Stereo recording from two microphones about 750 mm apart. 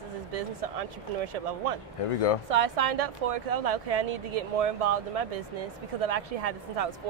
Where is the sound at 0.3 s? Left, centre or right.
Right.